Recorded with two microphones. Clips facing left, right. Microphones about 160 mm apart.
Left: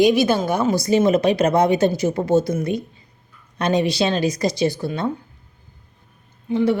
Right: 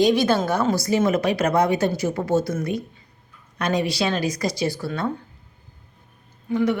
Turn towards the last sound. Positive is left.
turn(degrees=25)  # may be behind; listen again after turning